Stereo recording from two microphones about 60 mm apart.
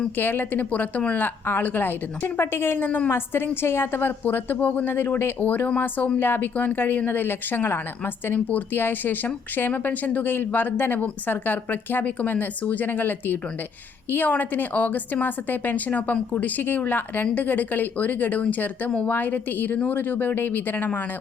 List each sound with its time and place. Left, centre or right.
0.2 s a woman's voice: left
6.1 s a woman's voice: left